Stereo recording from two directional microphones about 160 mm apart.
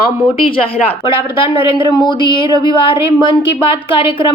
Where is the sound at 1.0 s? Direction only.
35° left (ahead or behind).